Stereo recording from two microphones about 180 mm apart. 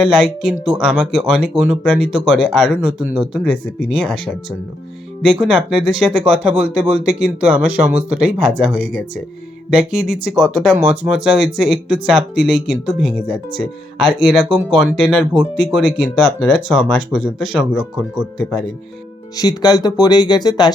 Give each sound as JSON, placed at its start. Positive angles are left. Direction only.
{"t": 0.0, "sound": "speech", "side_deg": -5}
{"t": 19.4, "sound": "speech", "side_deg": 20}